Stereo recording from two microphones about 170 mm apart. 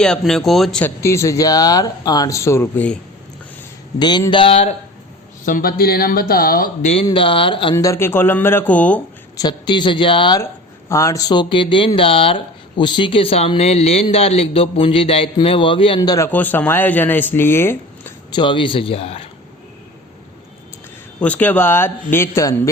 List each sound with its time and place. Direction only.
0.0 s speech: 5° left (ahead or behind)
3.9 s speech: 25° left (ahead or behind)
5.5 s speech: 55° left (ahead or behind)
6.8 s speech: 35° left (ahead or behind); by 9.0 s 10° left (ahead or behind)
9.4 s speech: 25° left (ahead or behind)
10.4 s speech: 15° left (ahead or behind)
16.0 s speech: 20° left (ahead or behind)
18.3 s speech: 25° left (ahead or behind)
21.2 s speech: 10° left (ahead or behind)